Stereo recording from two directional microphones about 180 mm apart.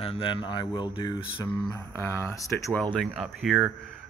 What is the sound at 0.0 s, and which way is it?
Speech, 30° left (ahead or behind).